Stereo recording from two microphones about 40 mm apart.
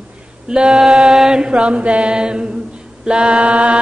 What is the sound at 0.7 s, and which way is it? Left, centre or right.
Chant, centre.